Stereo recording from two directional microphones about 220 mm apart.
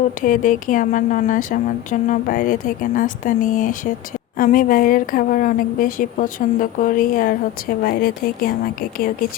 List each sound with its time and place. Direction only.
0.2 s a woman's voice: 35° left (ahead or behind)